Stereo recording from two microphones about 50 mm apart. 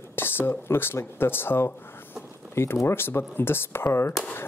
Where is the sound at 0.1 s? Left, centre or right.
Left.